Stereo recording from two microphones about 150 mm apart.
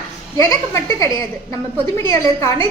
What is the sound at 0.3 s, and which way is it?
A child's voice, 20° left (ahead or behind).